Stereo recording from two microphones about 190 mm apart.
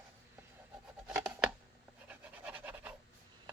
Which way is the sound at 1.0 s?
5° right (ahead or behind).